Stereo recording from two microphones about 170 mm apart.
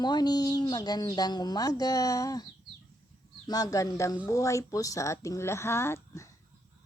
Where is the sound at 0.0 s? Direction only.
25° left (ahead or behind).